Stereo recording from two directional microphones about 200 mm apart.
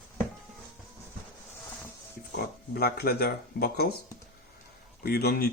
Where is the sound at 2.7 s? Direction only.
50° left (ahead or behind).